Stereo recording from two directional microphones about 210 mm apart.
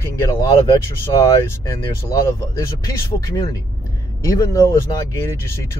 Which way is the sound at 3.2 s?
15° left (ahead or behind).